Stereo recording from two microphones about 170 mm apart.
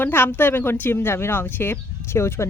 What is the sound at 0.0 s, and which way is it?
Speech, 10° left (ahead or behind).